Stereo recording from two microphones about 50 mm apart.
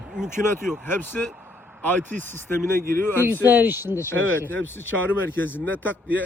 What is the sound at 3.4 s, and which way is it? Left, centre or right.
Speech, right.